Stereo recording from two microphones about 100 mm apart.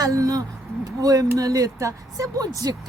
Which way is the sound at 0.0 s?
35° right (ahead or behind).